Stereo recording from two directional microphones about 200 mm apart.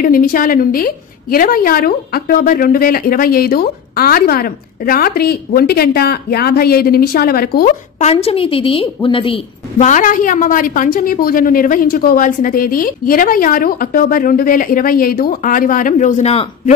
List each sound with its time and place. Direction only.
0.0 s a woman's voice: 45° left (ahead or behind)
8.0 s a woman's voice: 30° left (ahead or behind)